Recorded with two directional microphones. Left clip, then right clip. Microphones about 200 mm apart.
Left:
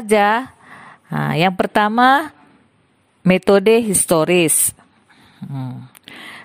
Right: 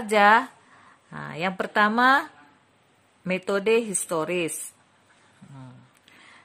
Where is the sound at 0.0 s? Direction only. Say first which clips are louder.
Left 3 dB; 50° left (ahead or behind).